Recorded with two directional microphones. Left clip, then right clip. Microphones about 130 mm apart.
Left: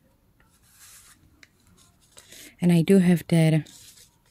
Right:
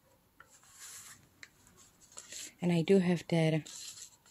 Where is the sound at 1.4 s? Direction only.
10° left (ahead or behind).